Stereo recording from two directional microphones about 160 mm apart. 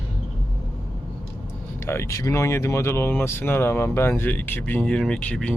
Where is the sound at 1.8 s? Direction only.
15° left (ahead or behind).